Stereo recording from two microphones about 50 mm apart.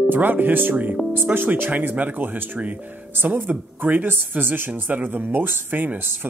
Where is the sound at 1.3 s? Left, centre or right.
Right.